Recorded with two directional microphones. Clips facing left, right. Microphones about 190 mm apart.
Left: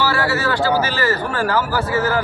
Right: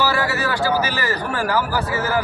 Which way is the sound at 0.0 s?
15° right (ahead or behind).